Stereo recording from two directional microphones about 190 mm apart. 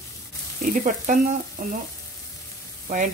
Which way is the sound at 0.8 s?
40° right (ahead or behind).